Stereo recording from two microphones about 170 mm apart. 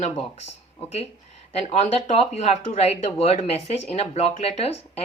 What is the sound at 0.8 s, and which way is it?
Speech, 35° left (ahead or behind).